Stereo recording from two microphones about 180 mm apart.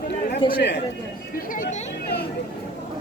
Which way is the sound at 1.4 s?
50° left (ahead or behind).